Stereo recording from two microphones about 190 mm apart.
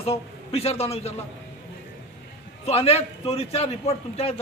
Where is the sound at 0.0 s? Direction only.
30° left (ahead or behind).